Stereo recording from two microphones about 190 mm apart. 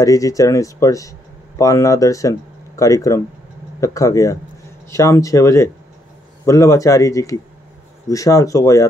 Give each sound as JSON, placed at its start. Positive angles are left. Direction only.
{"t": 0.0, "sound": "speech", "side_deg": 15}